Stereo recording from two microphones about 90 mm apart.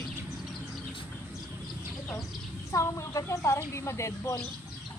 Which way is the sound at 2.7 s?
35° left (ahead or behind).